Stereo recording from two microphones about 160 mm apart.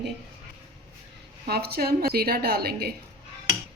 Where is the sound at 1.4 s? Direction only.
80° right.